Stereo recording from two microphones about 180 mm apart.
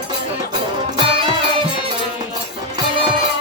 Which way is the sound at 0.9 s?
30° right (ahead or behind).